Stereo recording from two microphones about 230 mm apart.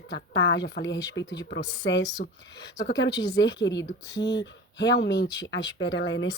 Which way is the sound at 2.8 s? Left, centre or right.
Left.